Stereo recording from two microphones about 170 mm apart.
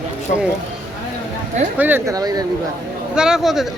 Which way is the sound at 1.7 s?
10° right (ahead or behind).